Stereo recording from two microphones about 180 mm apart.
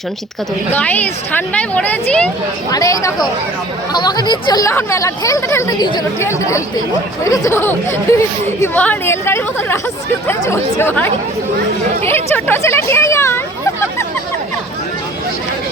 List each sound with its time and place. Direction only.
0.7 s speech: 10° left (ahead or behind)
2.6 s speech: 20° left (ahead or behind)